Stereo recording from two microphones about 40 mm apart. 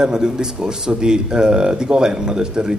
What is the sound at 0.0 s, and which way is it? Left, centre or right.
Speech, centre.